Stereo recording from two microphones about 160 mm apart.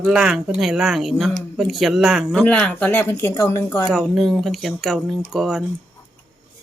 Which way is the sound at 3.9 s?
Centre (ahead or behind).